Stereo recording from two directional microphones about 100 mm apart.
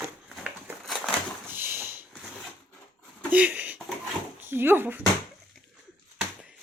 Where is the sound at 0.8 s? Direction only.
Centre (ahead or behind).